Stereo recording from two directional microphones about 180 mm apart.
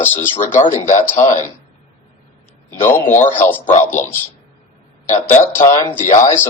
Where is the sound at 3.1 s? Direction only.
45° left (ahead or behind).